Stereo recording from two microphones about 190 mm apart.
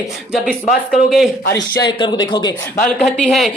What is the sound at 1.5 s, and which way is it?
A man's voice, 20° left (ahead or behind).